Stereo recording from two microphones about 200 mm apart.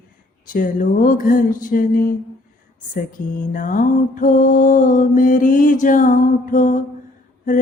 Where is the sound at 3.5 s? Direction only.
40° left (ahead or behind).